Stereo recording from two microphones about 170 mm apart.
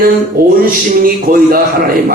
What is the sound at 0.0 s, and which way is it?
A man's voice, 55° right (ahead or behind).